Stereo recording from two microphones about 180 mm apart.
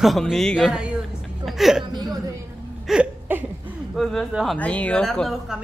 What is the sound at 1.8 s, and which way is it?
Speech, 25° right (ahead or behind).